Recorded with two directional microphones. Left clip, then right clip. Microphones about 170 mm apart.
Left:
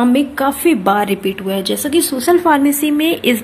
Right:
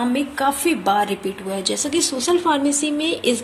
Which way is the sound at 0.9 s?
5° left (ahead or behind).